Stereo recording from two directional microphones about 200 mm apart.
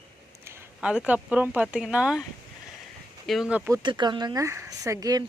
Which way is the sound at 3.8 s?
20° right (ahead or behind).